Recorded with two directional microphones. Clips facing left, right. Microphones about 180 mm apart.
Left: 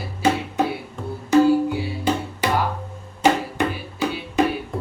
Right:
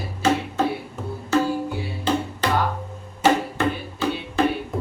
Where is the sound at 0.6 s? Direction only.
15° left (ahead or behind).